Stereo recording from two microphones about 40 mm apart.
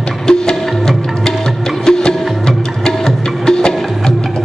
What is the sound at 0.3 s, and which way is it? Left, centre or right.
Music, centre.